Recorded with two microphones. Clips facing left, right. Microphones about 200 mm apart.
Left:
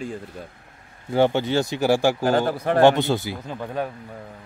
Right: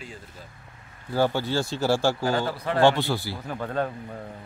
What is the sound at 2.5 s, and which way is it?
Speech, 50° left (ahead or behind).